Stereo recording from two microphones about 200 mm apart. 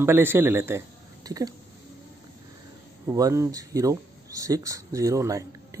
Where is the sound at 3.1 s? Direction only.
15° right (ahead or behind).